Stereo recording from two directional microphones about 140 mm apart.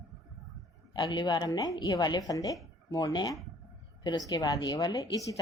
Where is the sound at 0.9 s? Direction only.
35° left (ahead or behind).